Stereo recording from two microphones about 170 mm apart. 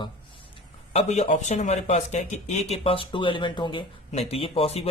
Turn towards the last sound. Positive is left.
turn(degrees=35)  # may be behind; listen again after turning